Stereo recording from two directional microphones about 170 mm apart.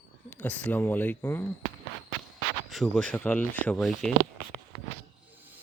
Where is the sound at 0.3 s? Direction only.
10° left (ahead or behind).